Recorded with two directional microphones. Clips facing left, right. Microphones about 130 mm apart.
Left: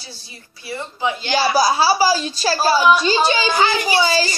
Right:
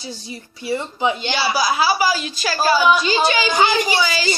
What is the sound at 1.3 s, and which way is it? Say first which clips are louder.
Speech: left 3 dB; 40° left (ahead or behind).